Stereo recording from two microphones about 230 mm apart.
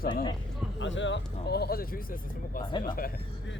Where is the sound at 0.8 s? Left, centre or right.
Left.